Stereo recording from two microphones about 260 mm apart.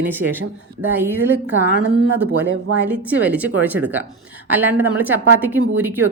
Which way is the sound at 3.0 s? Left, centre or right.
Centre.